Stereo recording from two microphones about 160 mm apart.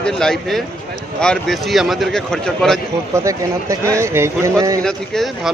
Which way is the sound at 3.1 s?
20° right (ahead or behind).